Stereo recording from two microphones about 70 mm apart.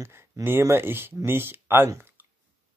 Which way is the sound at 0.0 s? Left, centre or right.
Right.